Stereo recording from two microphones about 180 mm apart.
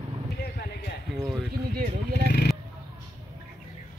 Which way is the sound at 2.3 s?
65° left (ahead or behind).